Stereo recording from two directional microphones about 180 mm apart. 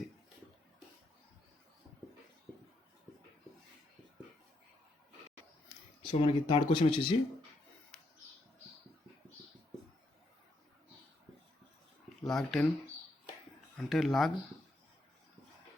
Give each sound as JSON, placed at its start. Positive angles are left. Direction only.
{"t": 6.0, "sound": "speech", "side_deg": 30}
{"t": 12.2, "sound": "speech", "side_deg": 0}
{"t": 13.7, "sound": "speech", "side_deg": 0}